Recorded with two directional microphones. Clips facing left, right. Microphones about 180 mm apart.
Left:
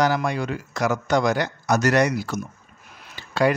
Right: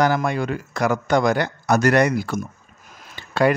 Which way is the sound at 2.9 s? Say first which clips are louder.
Right 2 dB; 55° right (ahead or behind).